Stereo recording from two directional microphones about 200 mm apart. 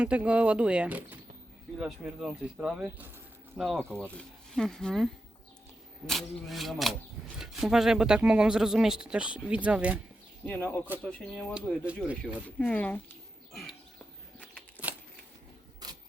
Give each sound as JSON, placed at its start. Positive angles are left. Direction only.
{"t": 0.0, "sound": "speech", "side_deg": -5}
{"t": 10.4, "sound": "a man's voice", "side_deg": 10}
{"t": 11.5, "sound": "speech", "side_deg": -5}
{"t": 14.8, "sound": "a sound", "side_deg": 10}
{"t": 15.8, "sound": "rub", "side_deg": -20}